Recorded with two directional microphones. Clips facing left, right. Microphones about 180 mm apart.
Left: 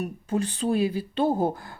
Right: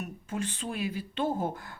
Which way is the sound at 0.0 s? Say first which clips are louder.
Left 7 dB; 35° left (ahead or behind).